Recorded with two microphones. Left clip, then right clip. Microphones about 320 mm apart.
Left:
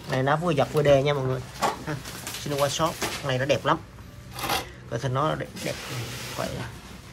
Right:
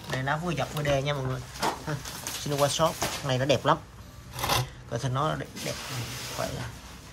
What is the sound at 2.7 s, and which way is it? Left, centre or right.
Speech, centre.